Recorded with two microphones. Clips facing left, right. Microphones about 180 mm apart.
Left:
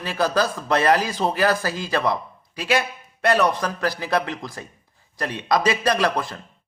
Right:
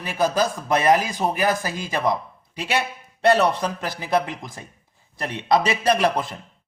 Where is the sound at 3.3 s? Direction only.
25° right (ahead or behind).